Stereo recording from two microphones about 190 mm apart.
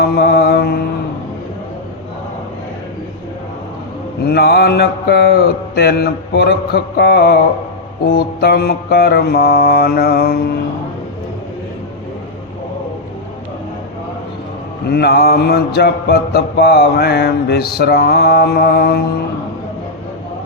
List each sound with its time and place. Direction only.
0.2 s mantra: 60° left (ahead or behind)
4.3 s mantra: 60° left (ahead or behind)
14.8 s mantra: 60° left (ahead or behind)